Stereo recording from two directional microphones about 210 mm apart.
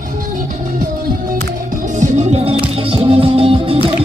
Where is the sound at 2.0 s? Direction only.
30° right (ahead or behind).